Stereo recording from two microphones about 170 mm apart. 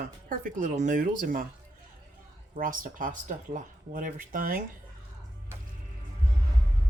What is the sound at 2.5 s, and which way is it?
Speech, 55° right (ahead or behind).